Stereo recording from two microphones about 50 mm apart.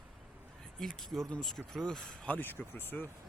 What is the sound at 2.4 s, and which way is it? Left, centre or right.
Speech, left.